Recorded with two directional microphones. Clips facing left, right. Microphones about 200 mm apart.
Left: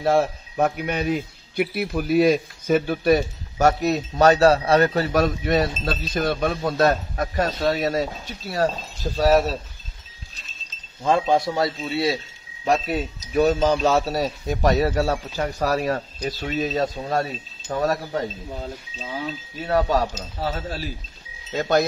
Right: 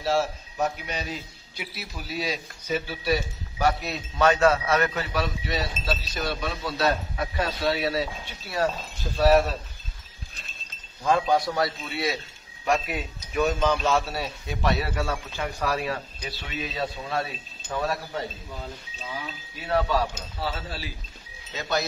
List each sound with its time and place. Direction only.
0.0 s speech: 55° left (ahead or behind); by 8.7 s 40° left (ahead or behind)
10.3 s chink: 55° right (ahead or behind)
11.1 s a man's voice: 25° left (ahead or behind); by 21.8 s 50° left (ahead or behind)